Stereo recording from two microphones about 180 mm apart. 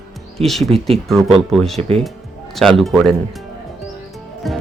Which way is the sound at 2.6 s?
Centre (ahead or behind).